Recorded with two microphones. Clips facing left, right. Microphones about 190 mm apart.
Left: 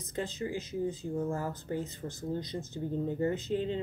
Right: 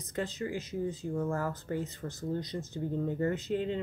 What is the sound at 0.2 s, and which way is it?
Speech, 20° left (ahead or behind).